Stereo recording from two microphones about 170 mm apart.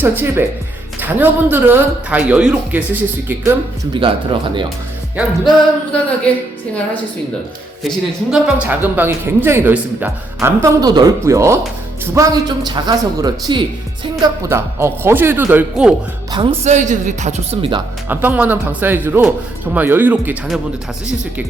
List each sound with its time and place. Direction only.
0.0 s speech: 10° right (ahead or behind)
3.9 s speech: 30° right (ahead or behind)
5.9 s speech: 5° left (ahead or behind)
7.9 s speech: 5° right (ahead or behind)
16.3 s a man's voice: 35° right (ahead or behind)
18.1 s speech: 10° right (ahead or behind)